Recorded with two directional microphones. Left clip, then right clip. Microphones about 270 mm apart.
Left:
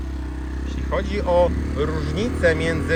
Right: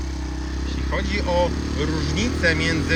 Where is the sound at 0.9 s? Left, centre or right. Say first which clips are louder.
Left 3 dB; centre.